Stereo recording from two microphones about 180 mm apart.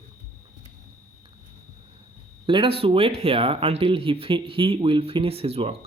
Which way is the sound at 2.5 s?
30° right (ahead or behind).